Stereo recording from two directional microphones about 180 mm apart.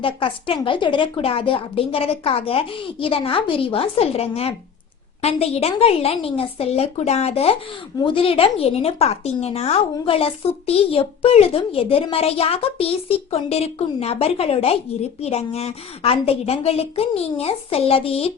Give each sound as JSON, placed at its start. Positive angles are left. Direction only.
{"t": 0.0, "sound": "a woman's voice", "side_deg": 30}